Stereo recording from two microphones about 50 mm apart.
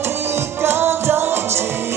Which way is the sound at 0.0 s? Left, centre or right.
Right.